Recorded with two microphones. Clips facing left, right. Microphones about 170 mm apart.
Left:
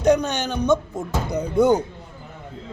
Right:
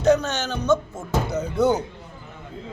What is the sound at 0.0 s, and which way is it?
Speech, 15° left (ahead or behind).